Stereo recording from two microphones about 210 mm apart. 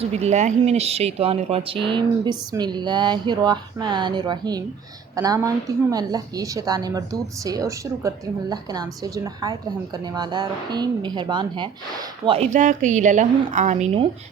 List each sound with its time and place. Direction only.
0.1 s a woman's voice: 30° right (ahead or behind)